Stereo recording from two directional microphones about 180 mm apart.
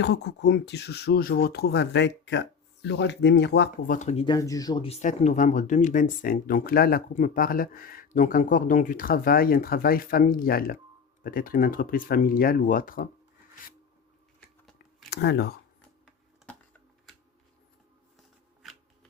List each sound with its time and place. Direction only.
0.0 s speech: 70° left (ahead or behind)
3.9 s speech: 40° left (ahead or behind)
4.4 s speech: 20° left (ahead or behind); by 13.1 s 50° left (ahead or behind)
15.1 s speech: 70° left (ahead or behind)
15.8 s a sound: 5° left (ahead or behind)
18.6 s shuffling cards: centre (ahead or behind)